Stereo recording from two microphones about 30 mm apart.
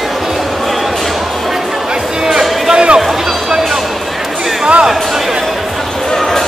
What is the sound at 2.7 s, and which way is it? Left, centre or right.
Music, right.